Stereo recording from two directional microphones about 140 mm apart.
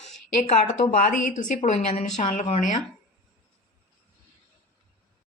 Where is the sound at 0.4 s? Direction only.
55° left (ahead or behind).